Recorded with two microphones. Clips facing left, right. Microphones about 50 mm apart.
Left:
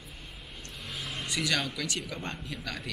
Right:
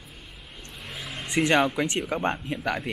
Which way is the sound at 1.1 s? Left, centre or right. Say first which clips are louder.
Right 9 dB; right.